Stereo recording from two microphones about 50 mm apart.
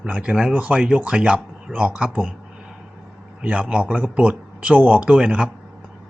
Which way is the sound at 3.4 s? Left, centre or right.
Right.